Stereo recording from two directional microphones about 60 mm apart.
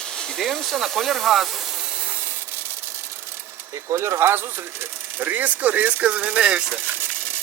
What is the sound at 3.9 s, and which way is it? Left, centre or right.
Speech, right.